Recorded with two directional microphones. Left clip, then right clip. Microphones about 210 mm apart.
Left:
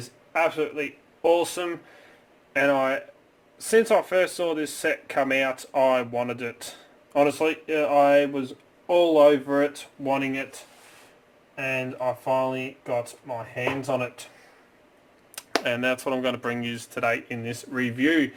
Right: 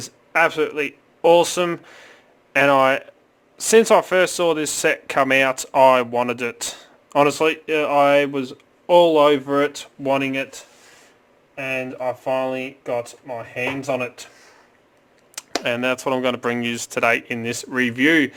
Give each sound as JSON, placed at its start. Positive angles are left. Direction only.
{"t": 0.3, "sound": "speech", "side_deg": -55}
{"t": 6.1, "sound": "speech", "side_deg": -45}
{"t": 11.7, "sound": "speech", "side_deg": -55}
{"t": 15.6, "sound": "speech", "side_deg": -25}